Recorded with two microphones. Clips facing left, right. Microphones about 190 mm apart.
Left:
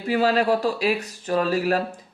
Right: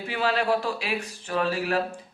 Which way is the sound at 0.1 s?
40° left (ahead or behind).